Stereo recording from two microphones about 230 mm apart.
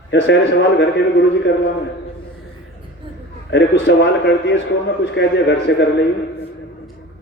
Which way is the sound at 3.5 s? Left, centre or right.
Left.